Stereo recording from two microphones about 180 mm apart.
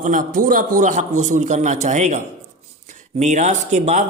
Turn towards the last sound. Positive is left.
turn(degrees=-40)  # may be behind; listen again after turning